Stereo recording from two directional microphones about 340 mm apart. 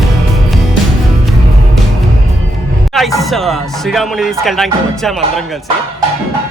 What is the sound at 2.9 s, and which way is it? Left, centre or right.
Speech, centre.